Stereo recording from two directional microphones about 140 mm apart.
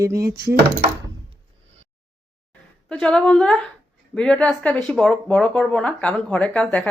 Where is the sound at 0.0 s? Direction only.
20° right (ahead or behind).